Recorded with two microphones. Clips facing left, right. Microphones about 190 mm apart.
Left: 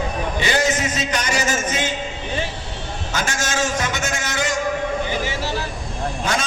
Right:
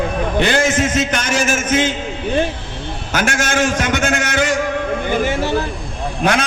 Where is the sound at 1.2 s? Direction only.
90° right.